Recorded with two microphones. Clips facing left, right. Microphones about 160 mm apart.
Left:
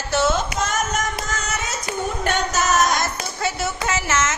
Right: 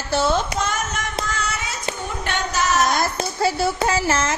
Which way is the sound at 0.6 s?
45° left (ahead or behind).